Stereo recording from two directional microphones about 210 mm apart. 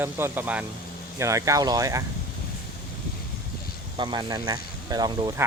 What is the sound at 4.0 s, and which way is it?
Speech, 20° right (ahead or behind).